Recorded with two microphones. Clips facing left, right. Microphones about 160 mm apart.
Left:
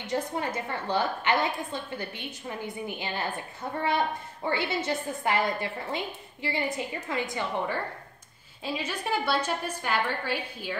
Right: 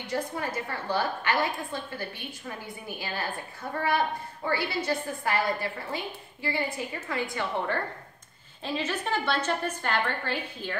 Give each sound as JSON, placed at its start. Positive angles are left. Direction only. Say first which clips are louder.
{"t": 0.0, "sound": "a woman's voice", "louder": "left 1 dB", "side_deg": 20}
{"t": 4.5, "sound": "a woman's voice", "louder": "even", "side_deg": 20}